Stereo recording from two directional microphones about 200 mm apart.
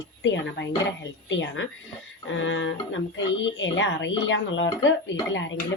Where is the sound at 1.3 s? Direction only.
65° left (ahead or behind).